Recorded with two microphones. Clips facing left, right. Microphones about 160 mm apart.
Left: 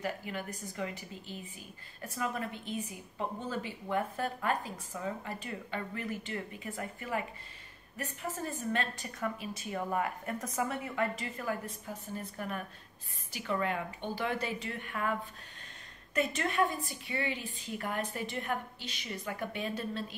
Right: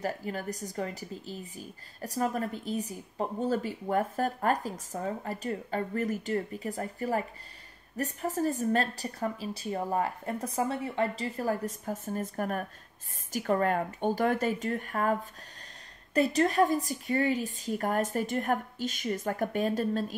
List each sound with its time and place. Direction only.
0.0 s a woman's voice: 40° right (ahead or behind)
16.2 s a woman's voice: 35° right (ahead or behind)